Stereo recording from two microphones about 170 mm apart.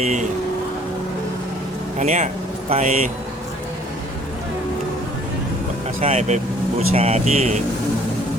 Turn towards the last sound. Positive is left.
turn(degrees=-40)  # may be behind; listen again after turning